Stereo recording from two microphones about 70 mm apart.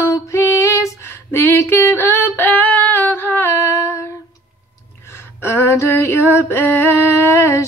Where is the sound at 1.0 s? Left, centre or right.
Left.